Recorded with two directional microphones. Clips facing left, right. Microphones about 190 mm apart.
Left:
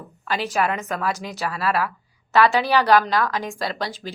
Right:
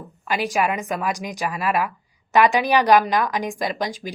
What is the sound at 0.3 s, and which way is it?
A woman's voice, 10° right (ahead or behind).